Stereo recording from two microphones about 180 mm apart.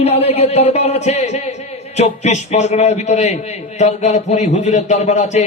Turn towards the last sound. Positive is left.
turn(degrees=40)  # may be behind; listen again after turning